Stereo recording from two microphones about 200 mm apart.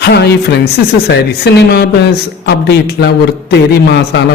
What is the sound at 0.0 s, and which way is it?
Speech, 55° left (ahead or behind).